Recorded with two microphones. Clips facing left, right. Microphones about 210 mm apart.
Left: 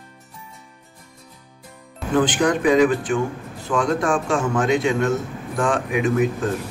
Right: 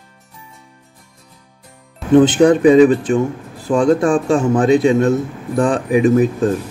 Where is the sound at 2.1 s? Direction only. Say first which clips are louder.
Right 9 dB; 25° right (ahead or behind).